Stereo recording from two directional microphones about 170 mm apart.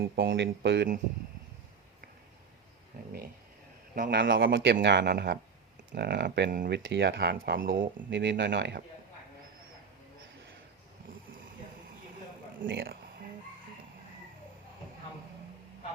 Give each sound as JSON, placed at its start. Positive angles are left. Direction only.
{"t": 0.0, "sound": "speech", "side_deg": -80}
{"t": 3.9, "sound": "a man's voice", "side_deg": -60}
{"t": 8.1, "sound": "speech", "side_deg": -90}
{"t": 12.5, "sound": "speech", "side_deg": -80}